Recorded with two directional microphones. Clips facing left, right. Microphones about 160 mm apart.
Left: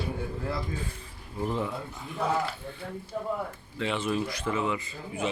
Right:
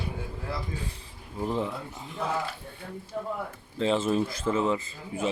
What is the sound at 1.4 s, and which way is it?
Speech, 15° right (ahead or behind).